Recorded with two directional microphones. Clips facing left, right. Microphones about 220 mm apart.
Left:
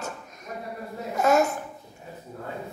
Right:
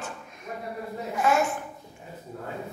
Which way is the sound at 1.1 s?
40° left (ahead or behind).